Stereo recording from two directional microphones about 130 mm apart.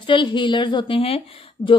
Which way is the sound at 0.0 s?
40° left (ahead or behind).